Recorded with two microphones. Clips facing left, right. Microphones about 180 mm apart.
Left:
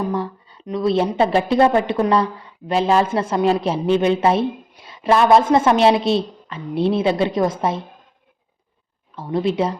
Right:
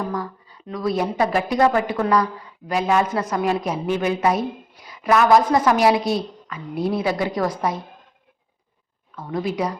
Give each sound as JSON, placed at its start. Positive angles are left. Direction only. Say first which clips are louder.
{"t": 0.0, "sound": "speech", "louder": "left 4 dB", "side_deg": 25}
{"t": 9.1, "sound": "speech", "louder": "left 5 dB", "side_deg": 30}